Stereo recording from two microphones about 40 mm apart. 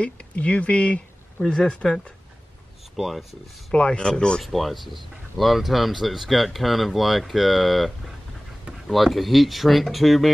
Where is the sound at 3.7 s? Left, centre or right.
Left.